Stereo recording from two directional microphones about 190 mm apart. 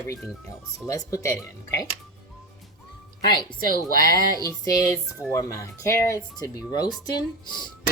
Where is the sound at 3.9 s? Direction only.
50° right (ahead or behind).